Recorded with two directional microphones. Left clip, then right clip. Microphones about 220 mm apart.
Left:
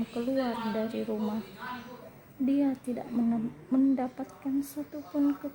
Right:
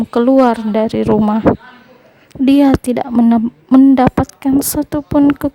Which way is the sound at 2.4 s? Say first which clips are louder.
Right 18 dB; 45° right (ahead or behind).